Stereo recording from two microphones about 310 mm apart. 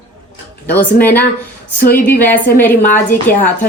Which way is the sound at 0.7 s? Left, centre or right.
Centre.